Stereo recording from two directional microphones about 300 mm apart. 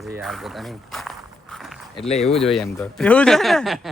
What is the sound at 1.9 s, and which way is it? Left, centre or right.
Speech, left.